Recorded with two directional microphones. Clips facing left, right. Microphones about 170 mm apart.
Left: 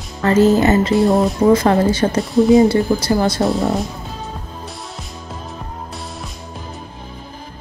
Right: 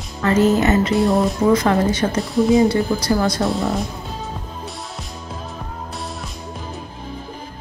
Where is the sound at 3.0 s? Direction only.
25° left (ahead or behind).